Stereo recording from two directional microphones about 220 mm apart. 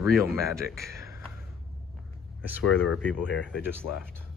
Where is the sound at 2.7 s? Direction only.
70° left (ahead or behind).